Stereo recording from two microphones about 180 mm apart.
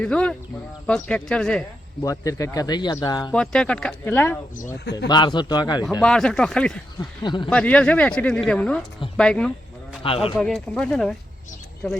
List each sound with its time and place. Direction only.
0.0 s speech: 5° left (ahead or behind)
2.0 s speech: 20° left (ahead or behind)
3.3 s speech: 5° left (ahead or behind)
5.0 s speech: 25° left (ahead or behind)
6.0 s speech: 5° left (ahead or behind)
7.0 s speech: 25° left (ahead or behind)
7.5 s speech: 5° left (ahead or behind)